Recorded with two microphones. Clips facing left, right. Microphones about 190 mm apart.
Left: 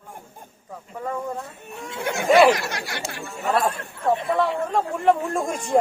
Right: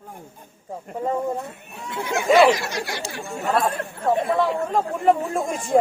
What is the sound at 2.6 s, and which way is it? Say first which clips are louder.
Speech: right 2 dB; 60° left (ahead or behind).